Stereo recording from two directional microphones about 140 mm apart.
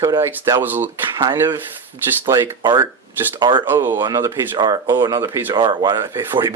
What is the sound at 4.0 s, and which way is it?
Speech, 30° right (ahead or behind).